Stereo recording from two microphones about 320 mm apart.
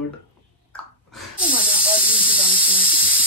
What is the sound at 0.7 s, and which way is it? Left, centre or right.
Hiss, centre.